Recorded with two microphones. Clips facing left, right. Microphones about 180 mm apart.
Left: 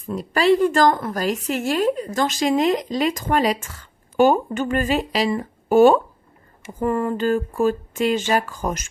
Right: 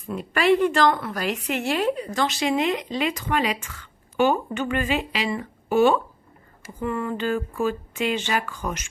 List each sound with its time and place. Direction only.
0.1 s a woman's voice: 35° left (ahead or behind)